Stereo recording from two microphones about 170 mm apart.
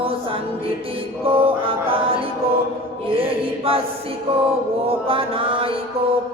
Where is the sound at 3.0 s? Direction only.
35° right (ahead or behind).